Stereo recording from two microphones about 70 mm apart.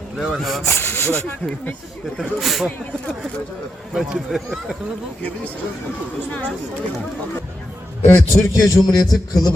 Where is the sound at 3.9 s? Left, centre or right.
Centre.